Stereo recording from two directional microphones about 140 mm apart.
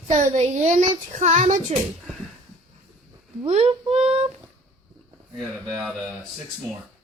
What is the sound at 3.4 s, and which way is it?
Speech, 50° right (ahead or behind).